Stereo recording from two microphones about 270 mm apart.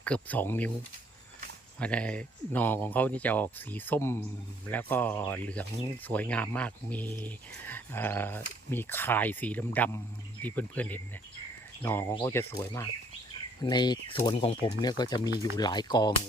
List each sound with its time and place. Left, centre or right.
0.0 s speech: centre
1.8 s speech: centre